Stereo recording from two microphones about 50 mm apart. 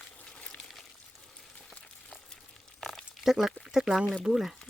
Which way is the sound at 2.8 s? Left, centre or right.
Centre.